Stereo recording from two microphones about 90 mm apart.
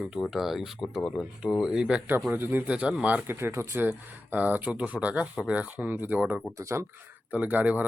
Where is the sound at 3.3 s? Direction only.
30° right (ahead or behind).